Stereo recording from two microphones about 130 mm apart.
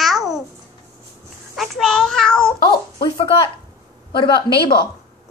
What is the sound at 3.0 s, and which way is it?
A woman's voice, 35° left (ahead or behind).